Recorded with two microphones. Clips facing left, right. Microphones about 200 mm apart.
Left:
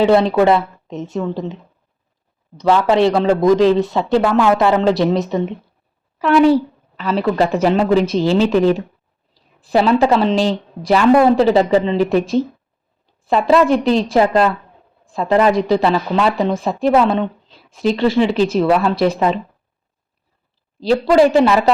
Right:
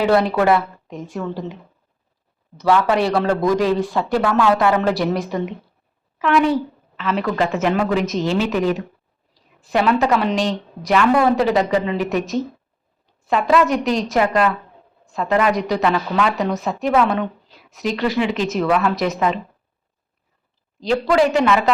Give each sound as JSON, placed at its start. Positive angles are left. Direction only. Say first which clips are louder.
{"t": 0.0, "sound": "a woman's voice", "louder": "left 4 dB", "side_deg": 25}
{"t": 2.6, "sound": "a woman's voice", "louder": "left 3 dB", "side_deg": 25}
{"t": 6.1, "sound": "a woman's voice", "louder": "left 5 dB", "side_deg": 35}
{"t": 20.8, "sound": "a woman's voice", "louder": "left 4 dB", "side_deg": 30}